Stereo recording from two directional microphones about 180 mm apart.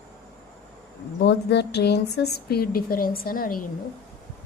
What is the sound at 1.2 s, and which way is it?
A woman's voice, 70° left (ahead or behind).